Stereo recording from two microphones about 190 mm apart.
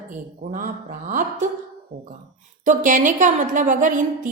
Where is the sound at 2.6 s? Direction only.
40° right (ahead or behind).